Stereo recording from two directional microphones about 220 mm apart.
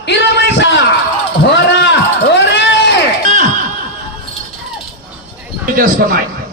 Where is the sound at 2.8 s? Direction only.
50° left (ahead or behind).